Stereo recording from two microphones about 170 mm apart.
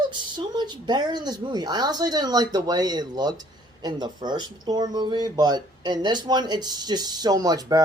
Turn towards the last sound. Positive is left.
turn(degrees=-20)  # may be behind; listen again after turning